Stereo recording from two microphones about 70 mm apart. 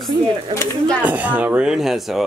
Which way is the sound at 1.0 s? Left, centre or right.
Right.